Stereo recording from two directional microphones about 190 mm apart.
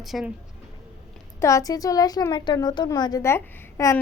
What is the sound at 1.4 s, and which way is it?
A child's voice, 15° left (ahead or behind).